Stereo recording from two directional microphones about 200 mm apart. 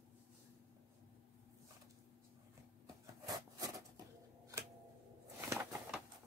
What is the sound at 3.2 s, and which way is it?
Wood, 20° right (ahead or behind).